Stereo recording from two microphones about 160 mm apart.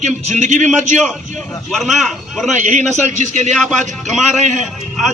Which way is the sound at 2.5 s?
50° right (ahead or behind).